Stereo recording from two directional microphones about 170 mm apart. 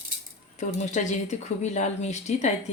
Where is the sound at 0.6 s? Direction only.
45° left (ahead or behind).